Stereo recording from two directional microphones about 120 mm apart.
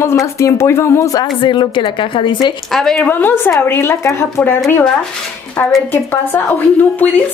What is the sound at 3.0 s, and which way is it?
A woman's voice, 15° left (ahead or behind).